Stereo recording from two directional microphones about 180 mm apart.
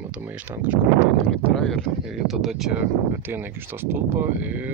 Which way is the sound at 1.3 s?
5° left (ahead or behind).